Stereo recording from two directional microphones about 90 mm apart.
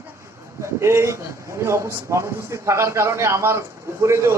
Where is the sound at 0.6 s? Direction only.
30° right (ahead or behind).